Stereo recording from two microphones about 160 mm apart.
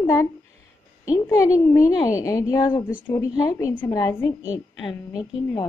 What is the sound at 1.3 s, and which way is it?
A woman's voice, 20° left (ahead or behind).